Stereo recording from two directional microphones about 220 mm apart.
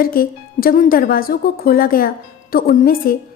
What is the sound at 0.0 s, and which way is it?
Speech, 40° left (ahead or behind).